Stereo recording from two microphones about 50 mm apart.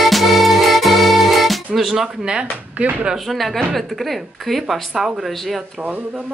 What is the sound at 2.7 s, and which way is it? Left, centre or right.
Speech, right.